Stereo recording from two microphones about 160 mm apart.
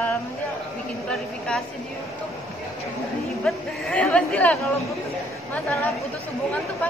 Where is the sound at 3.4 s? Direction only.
5° left (ahead or behind).